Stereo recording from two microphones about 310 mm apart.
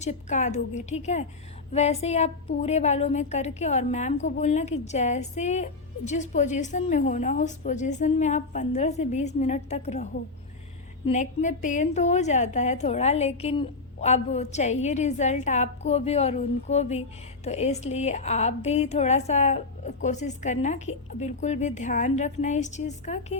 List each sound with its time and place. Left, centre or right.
0.0 s a woman's voice: left